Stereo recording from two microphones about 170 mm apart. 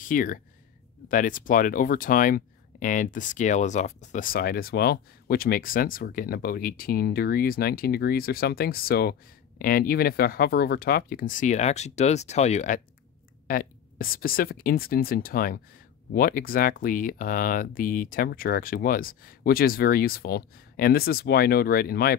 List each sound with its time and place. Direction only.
0.0 s speech: 55° left (ahead or behind)
13.5 s speech: 55° left (ahead or behind)